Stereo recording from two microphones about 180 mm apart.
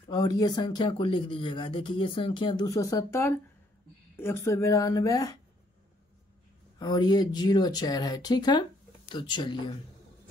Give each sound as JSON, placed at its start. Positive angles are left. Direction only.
{"t": 0.1, "sound": "a woman's voice", "side_deg": 20}
{"t": 6.8, "sound": "speech", "side_deg": 20}